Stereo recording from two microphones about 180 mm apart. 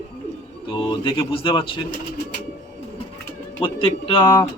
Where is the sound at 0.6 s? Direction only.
25° left (ahead or behind).